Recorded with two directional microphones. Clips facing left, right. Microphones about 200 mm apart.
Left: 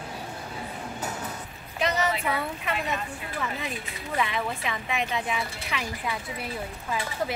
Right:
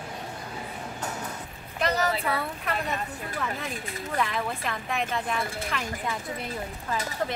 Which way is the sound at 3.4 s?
Centre (ahead or behind).